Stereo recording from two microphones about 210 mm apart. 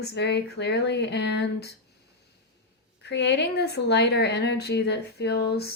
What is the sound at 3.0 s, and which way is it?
Speech, 55° left (ahead or behind).